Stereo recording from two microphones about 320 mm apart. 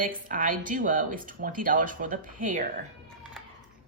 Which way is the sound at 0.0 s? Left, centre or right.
Right.